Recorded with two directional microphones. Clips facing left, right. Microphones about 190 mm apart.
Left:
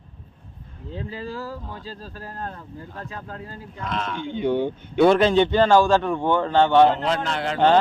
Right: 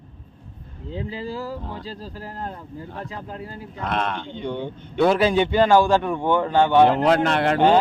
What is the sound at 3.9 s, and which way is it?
Speech, 60° right (ahead or behind).